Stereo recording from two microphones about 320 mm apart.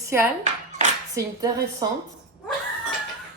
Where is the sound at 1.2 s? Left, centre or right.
Centre.